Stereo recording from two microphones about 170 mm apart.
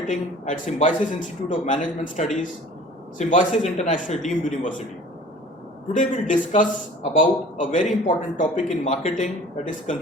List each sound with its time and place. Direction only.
0.1 s a man's voice: 50° left (ahead or behind)
5.9 s a man's voice: 50° left (ahead or behind)